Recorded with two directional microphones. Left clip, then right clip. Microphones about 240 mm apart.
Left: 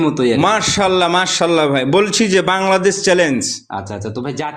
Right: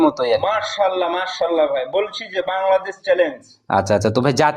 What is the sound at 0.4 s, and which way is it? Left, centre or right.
A man's voice, left.